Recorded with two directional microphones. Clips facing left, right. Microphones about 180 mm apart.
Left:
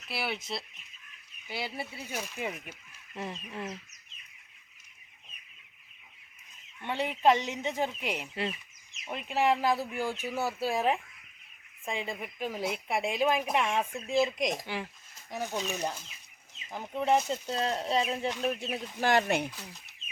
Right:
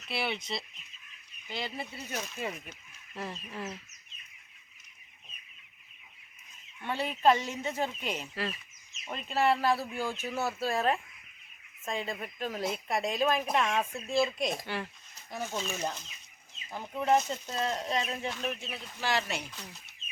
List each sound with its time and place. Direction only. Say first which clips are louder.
0.1 s speech: right 1 dB; 5° left (ahead or behind)
3.5 s speech: left 1 dB; 5° right (ahead or behind)
6.8 s speech: even; 15° left (ahead or behind)
16.9 s speech: even; 25° left (ahead or behind)
17.2 s speech: left 1 dB; 10° left (ahead or behind)
17.5 s speech: left 2 dB; 30° left (ahead or behind)
18.3 s speech: left 4 dB; 15° left (ahead or behind)
18.7 s speech: left 7 dB; 50° left (ahead or behind)
19.5 s speech: even; centre (ahead or behind)